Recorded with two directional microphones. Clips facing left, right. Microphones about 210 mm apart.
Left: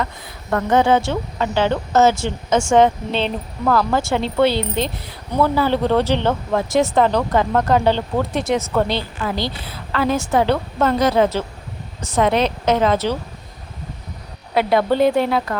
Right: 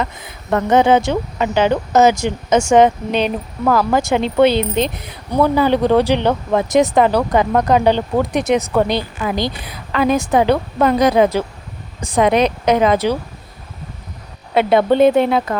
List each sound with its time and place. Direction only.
0.0 s speech: 20° right (ahead or behind)
14.5 s speech: 20° right (ahead or behind)